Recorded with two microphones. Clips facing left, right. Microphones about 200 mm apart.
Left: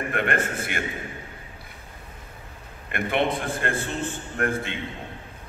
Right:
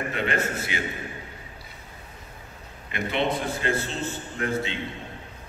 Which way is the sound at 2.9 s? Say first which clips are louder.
Left 2 dB; 55° left (ahead or behind).